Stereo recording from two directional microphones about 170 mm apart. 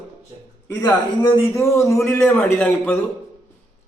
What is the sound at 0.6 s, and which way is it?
A man's voice, 20° left (ahead or behind).